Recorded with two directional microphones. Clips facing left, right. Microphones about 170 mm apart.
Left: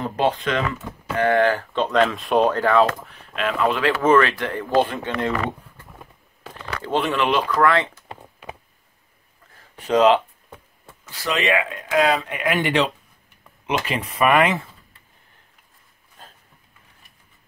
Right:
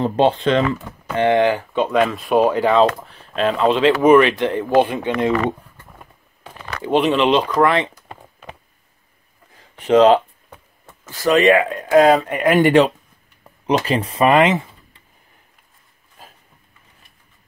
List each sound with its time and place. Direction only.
0.0 s speech: 30° right (ahead or behind); by 2.6 s 5° right (ahead or behind)
2.6 s speech: 20° right (ahead or behind)
3.1 s speech: 30° right (ahead or behind); by 5.3 s 15° right (ahead or behind)
6.8 s speech: 20° right (ahead or behind)
9.8 s speech: 25° right (ahead or behind)
11.1 s speech: 45° right (ahead or behind)
13.4 s speech: 35° right (ahead or behind); by 15.0 s 20° right (ahead or behind)
16.2 s a sound: 5° right (ahead or behind)